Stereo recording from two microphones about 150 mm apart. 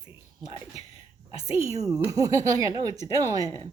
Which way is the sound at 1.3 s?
40° left (ahead or behind).